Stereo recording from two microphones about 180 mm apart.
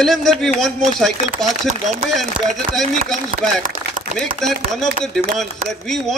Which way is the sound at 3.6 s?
40° right (ahead or behind).